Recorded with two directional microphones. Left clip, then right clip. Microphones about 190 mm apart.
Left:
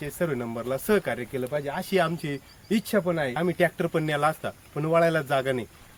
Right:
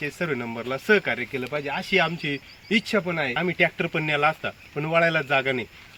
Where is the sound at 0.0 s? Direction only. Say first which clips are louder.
Right 1 dB; 20° left (ahead or behind).